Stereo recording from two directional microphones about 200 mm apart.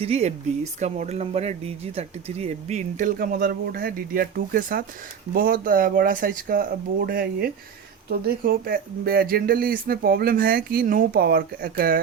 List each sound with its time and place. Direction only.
0.0 s speech: 30° right (ahead or behind); by 11.9 s 45° right (ahead or behind)